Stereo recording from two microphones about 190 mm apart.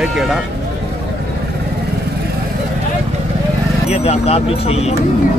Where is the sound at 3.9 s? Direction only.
35° left (ahead or behind).